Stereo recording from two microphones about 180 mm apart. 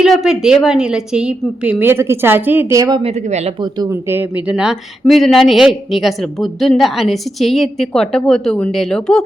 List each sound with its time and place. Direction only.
0.0 s a woman's voice: 5° right (ahead or behind); by 3.0 s 20° right (ahead or behind)
3.0 s speech: 35° right (ahead or behind)
3.6 s a woman's voice: 20° right (ahead or behind); by 9.2 s 5° left (ahead or behind)